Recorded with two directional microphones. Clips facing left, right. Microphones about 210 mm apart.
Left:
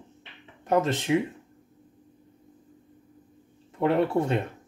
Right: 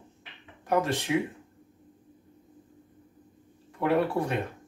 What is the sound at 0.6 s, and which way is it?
Speech, 20° left (ahead or behind).